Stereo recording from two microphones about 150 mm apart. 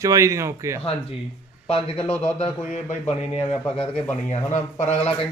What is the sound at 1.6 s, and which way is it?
Speech, 40° left (ahead or behind).